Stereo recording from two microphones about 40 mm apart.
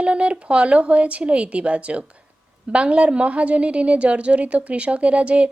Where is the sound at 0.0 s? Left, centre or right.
Right.